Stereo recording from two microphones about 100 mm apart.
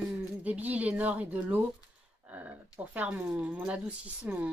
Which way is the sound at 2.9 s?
15° right (ahead or behind).